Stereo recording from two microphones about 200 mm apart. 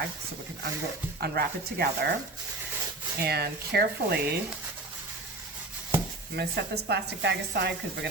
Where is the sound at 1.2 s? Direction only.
50° right (ahead or behind).